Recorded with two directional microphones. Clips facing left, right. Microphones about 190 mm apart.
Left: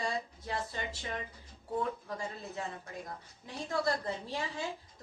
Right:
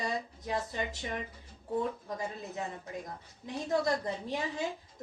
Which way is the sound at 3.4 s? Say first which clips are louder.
Right 3 dB; 20° right (ahead or behind).